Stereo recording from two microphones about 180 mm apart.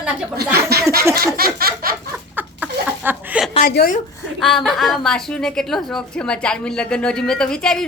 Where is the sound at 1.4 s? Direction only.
55° right (ahead or behind).